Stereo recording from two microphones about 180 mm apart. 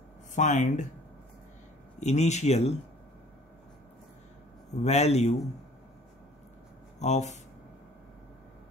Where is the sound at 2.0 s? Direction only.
40° left (ahead or behind).